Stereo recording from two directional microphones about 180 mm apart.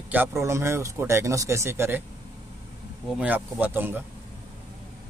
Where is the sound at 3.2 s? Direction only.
10° right (ahead or behind).